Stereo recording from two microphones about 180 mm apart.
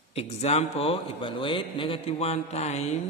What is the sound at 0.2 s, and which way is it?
A man's voice, 35° left (ahead or behind).